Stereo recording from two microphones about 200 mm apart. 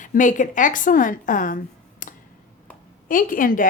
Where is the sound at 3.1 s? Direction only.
45° left (ahead or behind).